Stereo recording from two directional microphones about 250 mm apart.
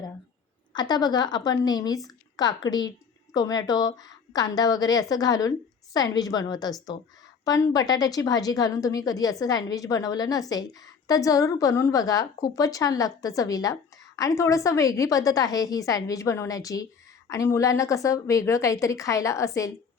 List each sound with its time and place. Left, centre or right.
0.7 s a woman's voice: centre